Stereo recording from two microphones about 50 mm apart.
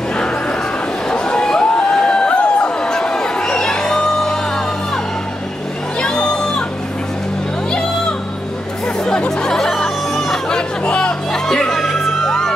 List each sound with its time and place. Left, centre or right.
1.1 s a sound: centre
5.9 s music: centre
9.4 s music: centre
11.7 s music: centre